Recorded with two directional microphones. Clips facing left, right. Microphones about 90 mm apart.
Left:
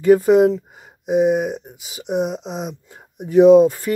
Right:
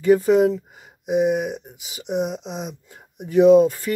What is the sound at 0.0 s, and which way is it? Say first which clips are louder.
Speech: left 3 dB; 40° left (ahead or behind).